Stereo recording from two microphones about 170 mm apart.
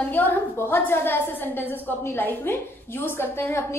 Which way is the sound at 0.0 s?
10° left (ahead or behind).